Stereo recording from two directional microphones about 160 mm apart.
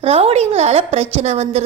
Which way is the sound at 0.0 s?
40° right (ahead or behind).